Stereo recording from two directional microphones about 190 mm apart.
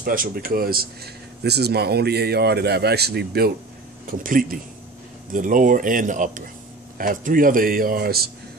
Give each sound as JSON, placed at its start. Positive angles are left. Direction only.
{"t": 0.0, "sound": "speech", "side_deg": -50}
{"t": 4.1, "sound": "speech", "side_deg": -45}